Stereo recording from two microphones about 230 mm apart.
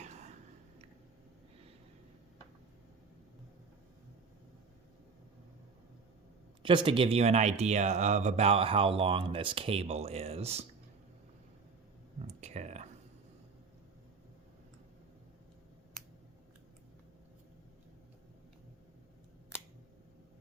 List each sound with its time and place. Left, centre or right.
0.0 s a sound: right
6.6 s speech: right
12.2 s clicking: right